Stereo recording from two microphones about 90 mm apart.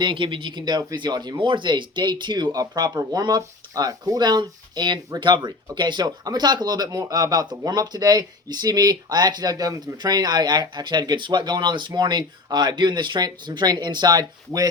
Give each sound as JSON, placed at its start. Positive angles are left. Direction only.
{"t": 0.0, "sound": "speech", "side_deg": -65}